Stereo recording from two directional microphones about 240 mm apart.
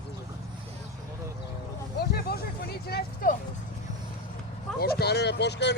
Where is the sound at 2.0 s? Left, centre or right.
Left.